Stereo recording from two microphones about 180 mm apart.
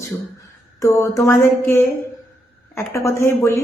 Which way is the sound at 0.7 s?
15° left (ahead or behind).